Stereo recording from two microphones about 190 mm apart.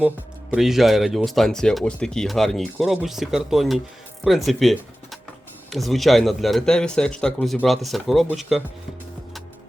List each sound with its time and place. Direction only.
0.5 s speech: centre (ahead or behind)